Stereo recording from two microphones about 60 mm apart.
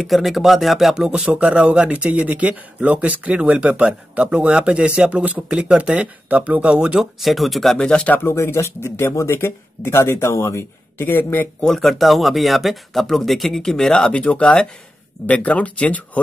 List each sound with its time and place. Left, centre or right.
0.0 s speech: centre
7.0 s speech: centre
8.2 s speech: left
11.6 s speech: centre; by 16.0 s left